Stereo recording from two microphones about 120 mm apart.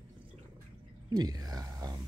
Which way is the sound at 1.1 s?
35° right (ahead or behind).